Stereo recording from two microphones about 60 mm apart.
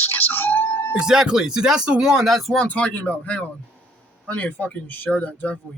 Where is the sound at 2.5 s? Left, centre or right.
Left.